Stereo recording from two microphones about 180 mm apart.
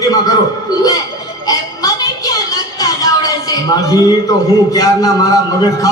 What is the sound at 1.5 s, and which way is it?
Music, 20° left (ahead or behind).